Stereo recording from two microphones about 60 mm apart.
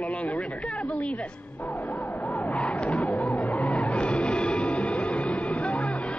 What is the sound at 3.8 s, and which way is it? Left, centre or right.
Music, left.